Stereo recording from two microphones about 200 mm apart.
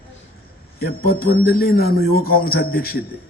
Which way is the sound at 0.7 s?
50° left (ahead or behind).